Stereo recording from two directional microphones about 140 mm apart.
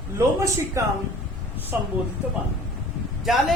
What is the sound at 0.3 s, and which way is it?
Speech, 20° right (ahead or behind).